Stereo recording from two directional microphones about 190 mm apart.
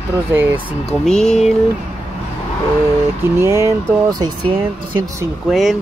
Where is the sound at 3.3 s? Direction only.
15° right (ahead or behind).